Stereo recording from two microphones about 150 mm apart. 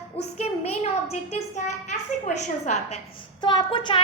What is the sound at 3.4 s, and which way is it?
Speech, 30° left (ahead or behind).